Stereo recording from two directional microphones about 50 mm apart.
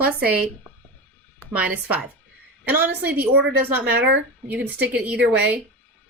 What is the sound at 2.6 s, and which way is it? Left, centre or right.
Speech, right.